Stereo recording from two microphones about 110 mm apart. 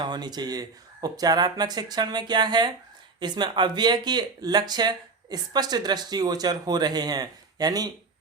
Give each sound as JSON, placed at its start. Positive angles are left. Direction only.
{"t": 0.0, "sound": "speech", "side_deg": -40}